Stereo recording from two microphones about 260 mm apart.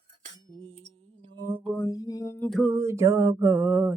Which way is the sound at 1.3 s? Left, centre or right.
Centre.